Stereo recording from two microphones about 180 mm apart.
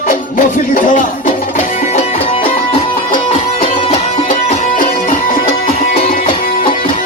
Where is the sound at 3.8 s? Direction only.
35° left (ahead or behind).